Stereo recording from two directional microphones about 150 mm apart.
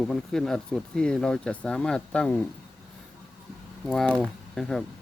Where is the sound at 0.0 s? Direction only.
5° left (ahead or behind).